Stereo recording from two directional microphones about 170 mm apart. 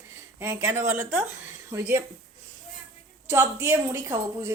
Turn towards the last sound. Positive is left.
turn(degrees=-15)  # may be behind; listen again after turning